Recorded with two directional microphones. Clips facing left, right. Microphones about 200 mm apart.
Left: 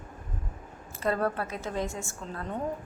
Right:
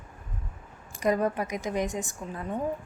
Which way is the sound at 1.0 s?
15° right (ahead or behind).